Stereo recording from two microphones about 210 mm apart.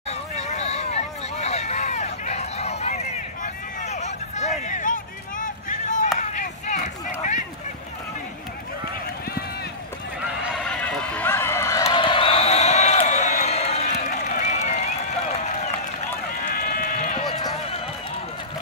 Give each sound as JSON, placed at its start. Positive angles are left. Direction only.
{"t": 0.4, "sound": "vehicle", "side_deg": 30}
{"t": 3.8, "sound": "a sound", "side_deg": 35}
{"t": 4.6, "sound": "chop", "side_deg": 35}
{"t": 10.4, "sound": "a sound", "side_deg": 0}
{"t": 16.4, "sound": "sheep", "side_deg": 40}
{"t": 17.3, "sound": "run", "side_deg": 20}